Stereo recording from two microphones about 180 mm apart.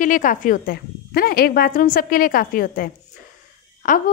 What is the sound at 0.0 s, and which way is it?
A woman's voice, 45° left (ahead or behind).